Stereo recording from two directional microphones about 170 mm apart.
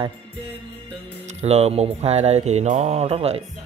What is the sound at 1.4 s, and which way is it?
Speech, 40° right (ahead or behind).